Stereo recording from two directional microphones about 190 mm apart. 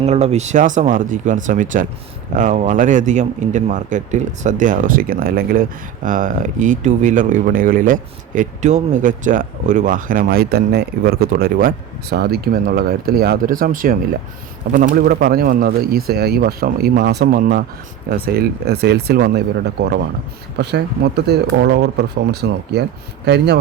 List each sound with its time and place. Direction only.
0.0 s a man's voice: 35° right (ahead or behind); by 23.6 s 60° right (ahead or behind)